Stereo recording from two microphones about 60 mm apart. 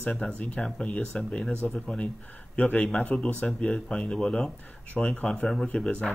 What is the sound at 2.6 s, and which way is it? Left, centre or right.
Speech, left.